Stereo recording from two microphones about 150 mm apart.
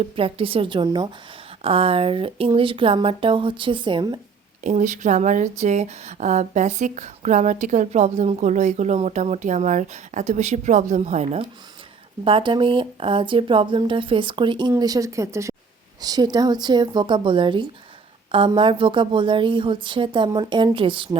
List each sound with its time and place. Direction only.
0.0 s speech: 40° right (ahead or behind)
1.6 s speech: 40° right (ahead or behind)
4.6 s speech: 55° right (ahead or behind)
12.2 s speech: 35° right (ahead or behind)